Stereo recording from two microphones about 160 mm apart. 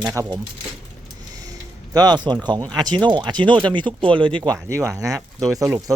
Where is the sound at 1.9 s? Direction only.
25° right (ahead or behind).